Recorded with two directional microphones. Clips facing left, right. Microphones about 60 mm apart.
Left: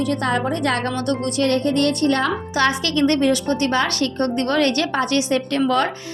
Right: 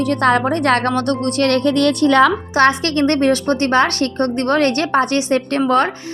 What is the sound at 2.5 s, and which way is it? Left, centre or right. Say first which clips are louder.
A woman's voice: right 5 dB; right.